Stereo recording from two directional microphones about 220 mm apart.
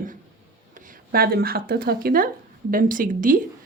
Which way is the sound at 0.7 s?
40° right (ahead or behind).